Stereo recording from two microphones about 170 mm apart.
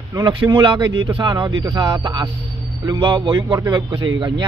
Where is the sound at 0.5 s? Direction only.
30° right (ahead or behind).